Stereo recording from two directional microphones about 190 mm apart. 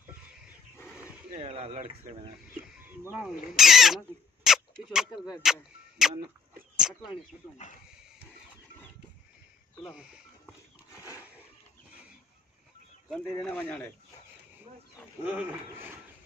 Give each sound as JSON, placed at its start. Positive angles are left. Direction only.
{"t": 0.7, "sound": "roaring cats", "side_deg": 10}
{"t": 1.3, "sound": "speech", "side_deg": -30}
{"t": 3.1, "sound": "speech", "side_deg": -5}
{"t": 6.8, "sound": "a sound", "side_deg": -5}
{"t": 10.9, "sound": "a sound", "side_deg": 15}
{"t": 13.3, "sound": "speech", "side_deg": 10}
{"t": 15.2, "sound": "speech", "side_deg": -10}